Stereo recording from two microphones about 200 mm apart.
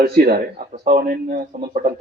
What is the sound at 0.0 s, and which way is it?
Speech, 50° right (ahead or behind).